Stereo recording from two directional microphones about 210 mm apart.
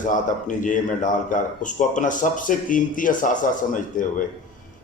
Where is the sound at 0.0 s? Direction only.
35° left (ahead or behind).